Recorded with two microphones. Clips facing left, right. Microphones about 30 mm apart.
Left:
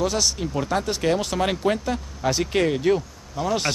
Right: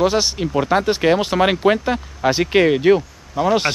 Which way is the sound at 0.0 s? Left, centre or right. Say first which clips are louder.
Right 6 dB; right.